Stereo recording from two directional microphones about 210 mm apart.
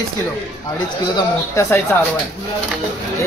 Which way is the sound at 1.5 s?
10° left (ahead or behind).